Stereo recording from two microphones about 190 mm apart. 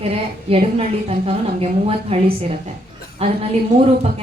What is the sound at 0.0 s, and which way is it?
A woman's voice, 30° right (ahead or behind).